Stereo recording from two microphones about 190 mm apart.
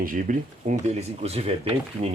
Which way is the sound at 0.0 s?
45° right (ahead or behind).